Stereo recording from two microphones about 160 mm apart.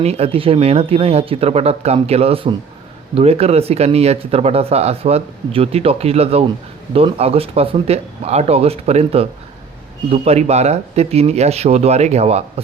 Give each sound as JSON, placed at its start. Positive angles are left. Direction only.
{"t": 0.0, "sound": "speech", "side_deg": -40}